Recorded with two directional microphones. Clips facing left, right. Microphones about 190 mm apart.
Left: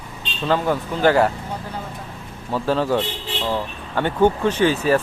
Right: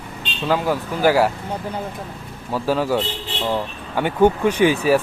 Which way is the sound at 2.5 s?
10° right (ahead or behind).